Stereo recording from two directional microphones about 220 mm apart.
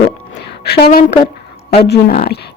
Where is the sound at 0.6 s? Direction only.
45° left (ahead or behind).